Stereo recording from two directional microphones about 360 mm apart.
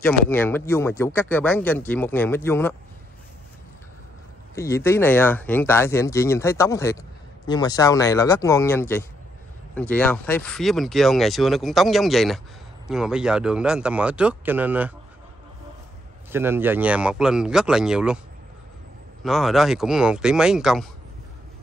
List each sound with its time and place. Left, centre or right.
0.0 s speech: centre
4.6 s speech: centre
16.3 s speech: centre
19.2 s speech: centre